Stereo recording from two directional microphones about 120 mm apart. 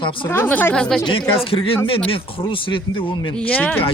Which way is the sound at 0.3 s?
20° left (ahead or behind).